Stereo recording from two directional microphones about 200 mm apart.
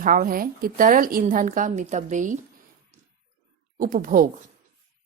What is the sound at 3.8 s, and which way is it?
Speech, 40° right (ahead or behind).